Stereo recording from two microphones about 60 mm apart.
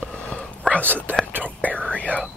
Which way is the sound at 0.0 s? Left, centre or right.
Centre.